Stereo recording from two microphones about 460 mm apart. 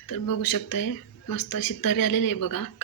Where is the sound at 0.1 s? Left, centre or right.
Left.